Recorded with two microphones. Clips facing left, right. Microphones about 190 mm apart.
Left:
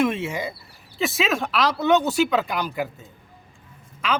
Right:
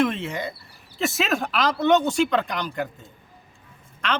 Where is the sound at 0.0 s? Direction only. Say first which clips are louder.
Left 1 dB; 10° left (ahead or behind).